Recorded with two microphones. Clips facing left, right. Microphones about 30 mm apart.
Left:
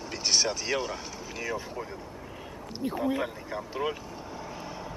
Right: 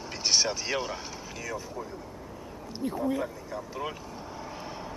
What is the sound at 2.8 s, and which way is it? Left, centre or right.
Speech, centre.